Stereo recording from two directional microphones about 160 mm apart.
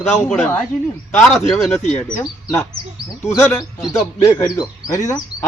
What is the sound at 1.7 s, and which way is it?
Speech, 45° left (ahead or behind).